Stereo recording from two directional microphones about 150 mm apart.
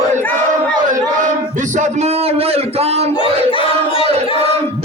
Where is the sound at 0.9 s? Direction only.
60° right (ahead or behind).